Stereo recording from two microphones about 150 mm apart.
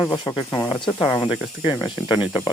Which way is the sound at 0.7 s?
35° left (ahead or behind).